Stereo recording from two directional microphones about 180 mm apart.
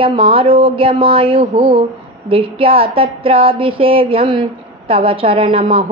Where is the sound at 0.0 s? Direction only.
30° right (ahead or behind).